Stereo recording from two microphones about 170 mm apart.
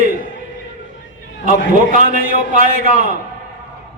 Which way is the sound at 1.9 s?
50° right (ahead or behind).